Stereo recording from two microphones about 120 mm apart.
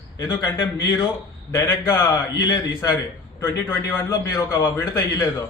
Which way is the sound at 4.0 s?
30° left (ahead or behind).